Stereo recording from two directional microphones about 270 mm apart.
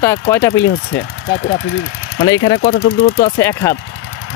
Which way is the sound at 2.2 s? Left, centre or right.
Centre.